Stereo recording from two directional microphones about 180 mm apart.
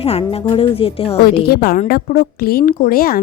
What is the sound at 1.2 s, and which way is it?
Speech, 60° left (ahead or behind).